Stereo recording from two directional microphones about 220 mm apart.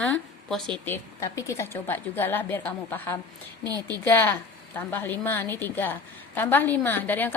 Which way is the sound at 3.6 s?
15° right (ahead or behind).